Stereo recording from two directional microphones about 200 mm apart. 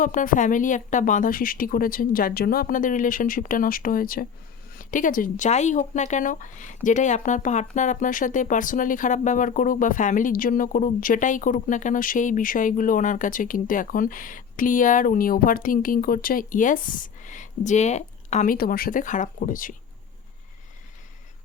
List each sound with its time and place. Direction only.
0.0 s a woman's voice: 40° left (ahead or behind)
18.5 s a woman's voice: 50° left (ahead or behind)